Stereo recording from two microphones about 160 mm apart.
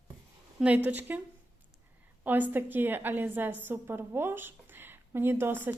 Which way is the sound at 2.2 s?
10° right (ahead or behind).